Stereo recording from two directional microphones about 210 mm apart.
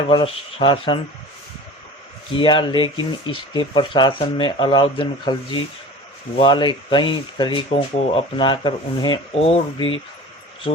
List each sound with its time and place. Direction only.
0.1 s speech: 25° left (ahead or behind)
2.3 s speech: 25° left (ahead or behind)